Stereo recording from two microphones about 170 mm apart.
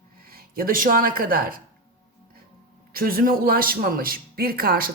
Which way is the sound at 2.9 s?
60° right (ahead or behind).